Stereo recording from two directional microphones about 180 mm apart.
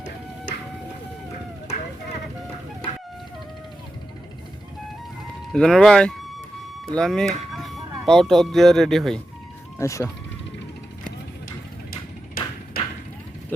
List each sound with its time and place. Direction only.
5.5 s speech: 5° left (ahead or behind)
9.7 s speech: 15° left (ahead or behind)
11.9 s a sound: 55° left (ahead or behind)